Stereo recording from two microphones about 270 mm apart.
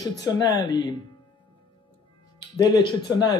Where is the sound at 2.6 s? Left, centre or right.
Centre.